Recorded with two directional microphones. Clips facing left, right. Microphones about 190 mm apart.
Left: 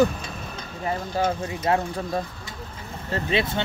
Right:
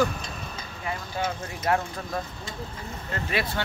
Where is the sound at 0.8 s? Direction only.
40° left (ahead or behind).